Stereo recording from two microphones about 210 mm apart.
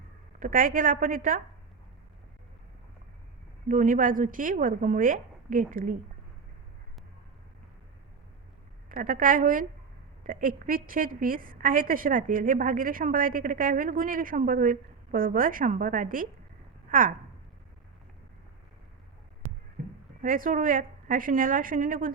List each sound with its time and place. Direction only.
0.3 s a woman's voice: 40° right (ahead or behind)
3.7 s a woman's voice: 40° right (ahead or behind)
8.9 s a woman's voice: 40° right (ahead or behind)
20.2 s a woman's voice: 40° right (ahead or behind)